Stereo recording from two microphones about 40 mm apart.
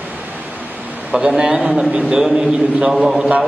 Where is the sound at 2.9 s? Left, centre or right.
Centre.